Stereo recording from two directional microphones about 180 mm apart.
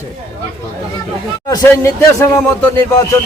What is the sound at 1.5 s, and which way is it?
Speech, 15° left (ahead or behind).